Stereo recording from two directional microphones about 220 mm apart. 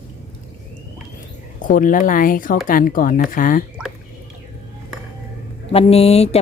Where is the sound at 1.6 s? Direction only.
40° left (ahead or behind).